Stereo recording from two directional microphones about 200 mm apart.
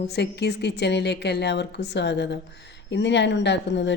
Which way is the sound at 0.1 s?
55° left (ahead or behind).